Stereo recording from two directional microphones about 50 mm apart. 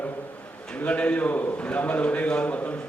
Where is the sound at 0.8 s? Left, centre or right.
Left.